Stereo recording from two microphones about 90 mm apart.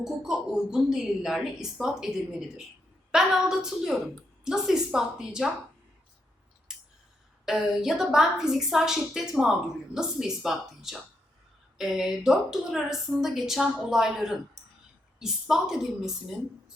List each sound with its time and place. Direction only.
0.0 s a woman's voice: 5° right (ahead or behind)
6.7 s scissors: 5° right (ahead or behind)
7.4 s a woman's voice: 5° right (ahead or behind)